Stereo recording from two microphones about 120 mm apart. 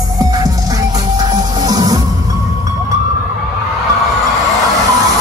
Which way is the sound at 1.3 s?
35° right (ahead or behind).